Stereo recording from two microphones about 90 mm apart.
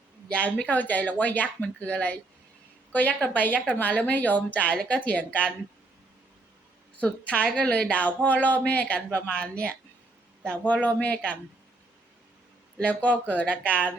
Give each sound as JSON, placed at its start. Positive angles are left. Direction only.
{"t": 0.3, "sound": "speech", "side_deg": 15}
{"t": 7.0, "sound": "speech", "side_deg": 15}
{"t": 12.8, "sound": "speech", "side_deg": 15}